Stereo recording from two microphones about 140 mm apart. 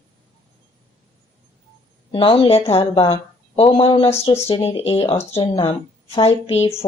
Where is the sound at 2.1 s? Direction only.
40° left (ahead or behind).